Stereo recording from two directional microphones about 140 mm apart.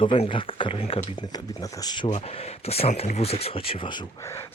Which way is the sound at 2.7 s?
45° left (ahead or behind).